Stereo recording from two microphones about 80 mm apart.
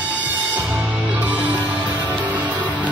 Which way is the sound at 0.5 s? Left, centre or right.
Right.